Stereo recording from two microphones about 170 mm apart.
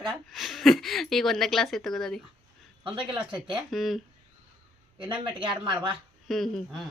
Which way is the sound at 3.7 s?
Centre (ahead or behind).